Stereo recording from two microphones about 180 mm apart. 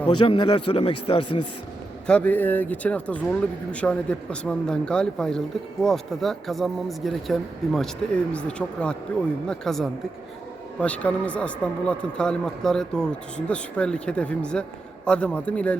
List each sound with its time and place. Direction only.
0.1 s a man's voice: 25° left (ahead or behind)
2.0 s speech: 5° left (ahead or behind)